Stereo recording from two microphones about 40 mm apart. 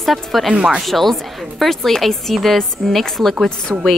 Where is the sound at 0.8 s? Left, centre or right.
Centre.